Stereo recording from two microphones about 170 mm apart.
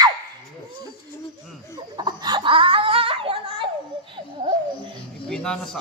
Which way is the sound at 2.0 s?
25° right (ahead or behind).